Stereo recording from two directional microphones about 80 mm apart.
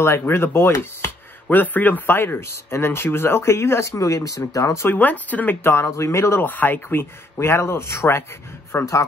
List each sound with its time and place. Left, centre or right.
0.0 s speech: left
4.8 s speech: left